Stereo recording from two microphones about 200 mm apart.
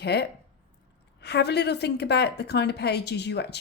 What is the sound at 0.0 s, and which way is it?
Speech, 55° left (ahead or behind).